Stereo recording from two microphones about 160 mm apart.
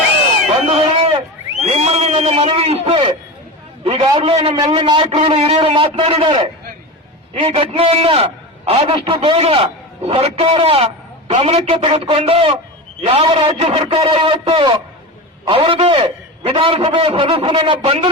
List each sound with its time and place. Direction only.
1.6 s a man's voice: 40° right (ahead or behind)